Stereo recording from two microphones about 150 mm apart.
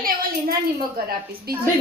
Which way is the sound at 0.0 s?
70° right (ahead or behind).